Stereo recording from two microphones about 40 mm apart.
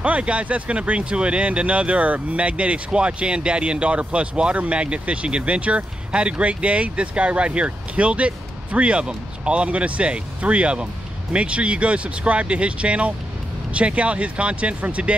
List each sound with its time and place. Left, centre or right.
0.0 s speech: right